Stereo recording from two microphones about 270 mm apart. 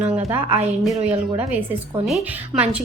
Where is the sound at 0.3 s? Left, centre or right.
Centre.